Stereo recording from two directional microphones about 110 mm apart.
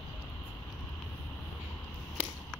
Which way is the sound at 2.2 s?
15° right (ahead or behind).